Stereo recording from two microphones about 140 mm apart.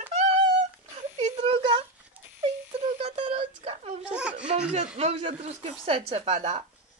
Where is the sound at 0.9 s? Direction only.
45° right (ahead or behind).